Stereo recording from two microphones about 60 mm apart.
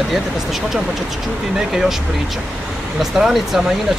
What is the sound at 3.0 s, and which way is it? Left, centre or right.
Speech, centre.